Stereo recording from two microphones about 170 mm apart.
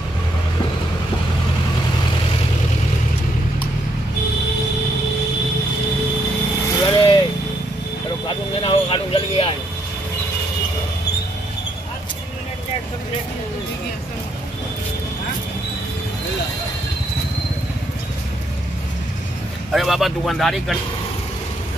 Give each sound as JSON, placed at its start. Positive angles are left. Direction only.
{"t": 6.8, "sound": "vehicle", "side_deg": 25}
{"t": 8.3, "sound": "vehicle", "side_deg": 35}
{"t": 19.7, "sound": "vehicle", "side_deg": 0}